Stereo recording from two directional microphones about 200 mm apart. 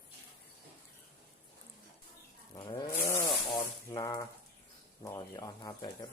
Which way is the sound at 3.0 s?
15° left (ahead or behind).